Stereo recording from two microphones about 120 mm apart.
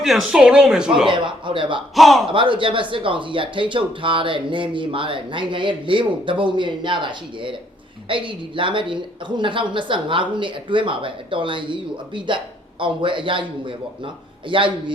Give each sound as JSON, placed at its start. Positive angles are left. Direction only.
{"t": 0.0, "sound": "speech", "side_deg": -5}
{"t": 1.1, "sound": "speech", "side_deg": -45}
{"t": 2.0, "sound": "speech", "side_deg": 0}
{"t": 2.3, "sound": "speech", "side_deg": -45}